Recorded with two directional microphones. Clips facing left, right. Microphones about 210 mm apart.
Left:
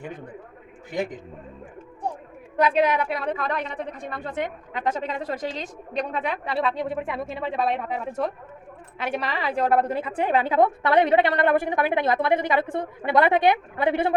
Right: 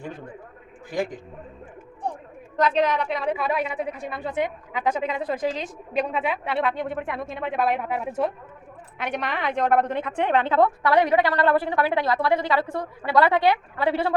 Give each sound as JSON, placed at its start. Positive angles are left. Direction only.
{"t": 2.6, "sound": "a woman's voice", "side_deg": 10}
{"t": 10.8, "sound": "a woman's voice", "side_deg": 25}